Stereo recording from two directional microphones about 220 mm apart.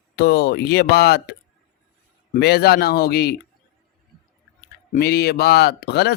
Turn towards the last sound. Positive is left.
turn(degrees=45)  # may be behind; listen again after turning